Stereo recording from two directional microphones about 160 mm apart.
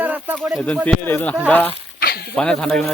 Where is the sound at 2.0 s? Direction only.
70° left (ahead or behind).